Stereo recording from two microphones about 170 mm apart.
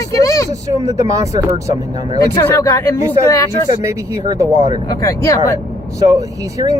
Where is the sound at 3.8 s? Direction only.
20° right (ahead or behind).